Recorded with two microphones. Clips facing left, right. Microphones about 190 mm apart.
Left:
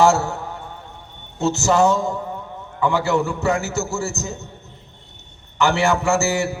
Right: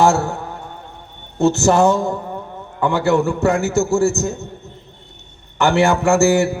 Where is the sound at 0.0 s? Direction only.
55° right (ahead or behind).